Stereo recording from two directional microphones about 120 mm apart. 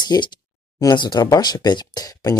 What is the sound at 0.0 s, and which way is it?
Speech, 40° left (ahead or behind).